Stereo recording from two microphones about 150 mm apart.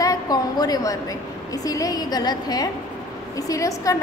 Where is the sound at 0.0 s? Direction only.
25° left (ahead or behind).